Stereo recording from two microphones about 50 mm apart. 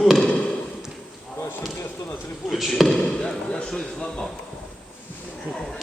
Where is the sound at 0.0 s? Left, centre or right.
Centre.